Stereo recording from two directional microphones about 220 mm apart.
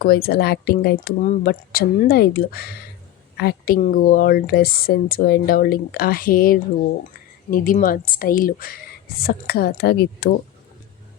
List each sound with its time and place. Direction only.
0.0 s a woman's voice: 45° left (ahead or behind)